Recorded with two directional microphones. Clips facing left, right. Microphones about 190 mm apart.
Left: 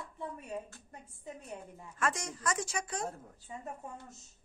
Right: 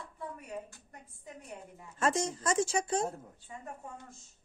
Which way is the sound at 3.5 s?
25° left (ahead or behind).